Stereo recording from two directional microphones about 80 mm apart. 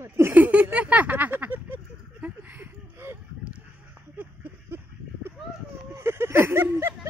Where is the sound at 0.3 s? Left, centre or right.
Centre.